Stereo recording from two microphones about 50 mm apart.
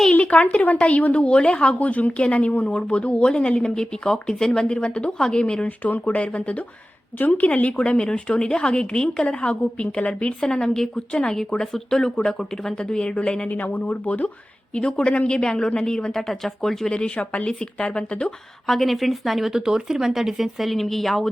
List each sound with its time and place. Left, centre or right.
0.1 s a woman's voice: left
5.6 s a woman's voice: left; by 13.5 s centre
13.5 s speech: left
14.7 s a woman's voice: left
16.9 s speech: left
18.6 s speech: centre